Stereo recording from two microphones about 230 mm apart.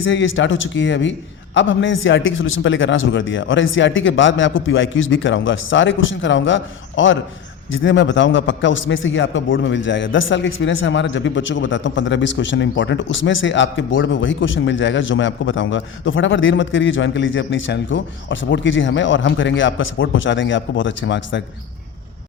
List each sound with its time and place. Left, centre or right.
0.0 s a man's voice: left